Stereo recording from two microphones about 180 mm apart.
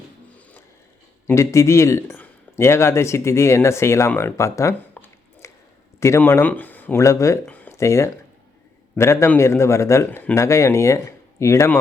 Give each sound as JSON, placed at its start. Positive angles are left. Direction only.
{"t": 1.3, "sound": "a man's voice", "side_deg": 15}